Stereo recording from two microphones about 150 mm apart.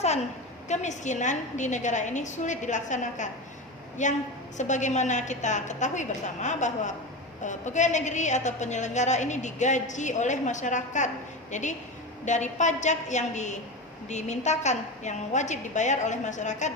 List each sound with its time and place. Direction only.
0.7 s a woman's voice: 50° left (ahead or behind)